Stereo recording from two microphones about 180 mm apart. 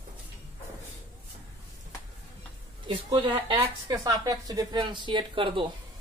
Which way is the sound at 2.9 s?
25° right (ahead or behind).